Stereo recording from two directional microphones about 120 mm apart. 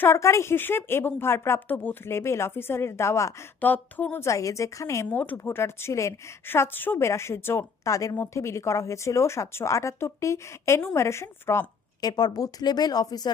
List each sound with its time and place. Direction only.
0.0 s speech: 25° left (ahead or behind)
12.0 s speech: 35° left (ahead or behind)